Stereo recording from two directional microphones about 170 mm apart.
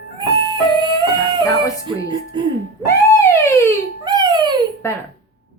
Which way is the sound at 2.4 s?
30° right (ahead or behind).